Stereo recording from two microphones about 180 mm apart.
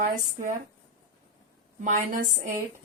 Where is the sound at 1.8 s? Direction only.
45° right (ahead or behind).